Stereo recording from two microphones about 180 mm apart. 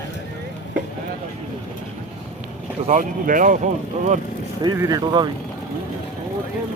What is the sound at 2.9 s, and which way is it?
Speech, 50° right (ahead or behind).